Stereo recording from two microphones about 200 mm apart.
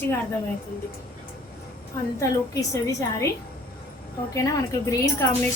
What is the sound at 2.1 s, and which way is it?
A woman's voice, 15° left (ahead or behind).